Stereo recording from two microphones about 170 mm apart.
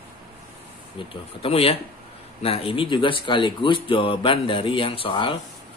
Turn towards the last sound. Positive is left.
turn(degrees=30)  # may be behind; listen again after turning